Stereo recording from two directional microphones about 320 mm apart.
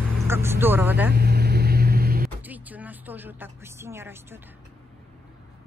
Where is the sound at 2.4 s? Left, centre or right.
Centre.